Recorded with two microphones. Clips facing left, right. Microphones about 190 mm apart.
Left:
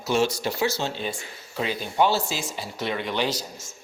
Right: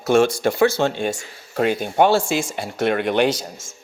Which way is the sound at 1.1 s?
80° right.